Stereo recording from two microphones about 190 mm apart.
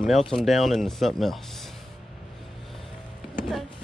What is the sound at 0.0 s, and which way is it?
Speech, centre (ahead or behind).